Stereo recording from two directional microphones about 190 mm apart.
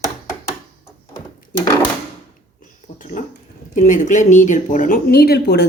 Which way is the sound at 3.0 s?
40° left (ahead or behind).